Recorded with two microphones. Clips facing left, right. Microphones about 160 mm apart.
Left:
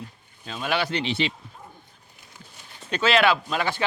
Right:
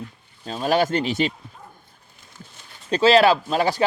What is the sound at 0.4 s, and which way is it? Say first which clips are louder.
Speech: right 6 dB; 40° right (ahead or behind).